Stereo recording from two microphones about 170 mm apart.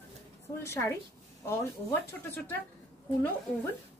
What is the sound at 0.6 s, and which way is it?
Speech, 15° left (ahead or behind).